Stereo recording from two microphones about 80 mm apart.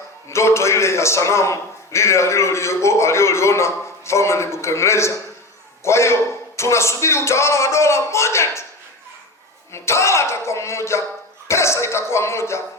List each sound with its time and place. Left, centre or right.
0.3 s a man's voice: left
9.7 s a man's voice: left